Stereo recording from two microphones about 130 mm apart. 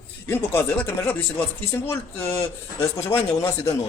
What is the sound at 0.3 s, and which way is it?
Speech, 15° left (ahead or behind).